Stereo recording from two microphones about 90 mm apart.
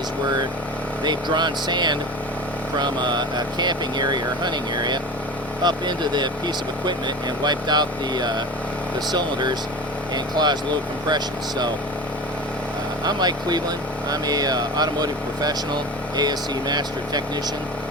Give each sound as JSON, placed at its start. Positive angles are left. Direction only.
{"t": 1.0, "sound": "speech", "side_deg": -55}
{"t": 7.4, "sound": "speech", "side_deg": -50}
{"t": 13.1, "sound": "speech", "side_deg": -50}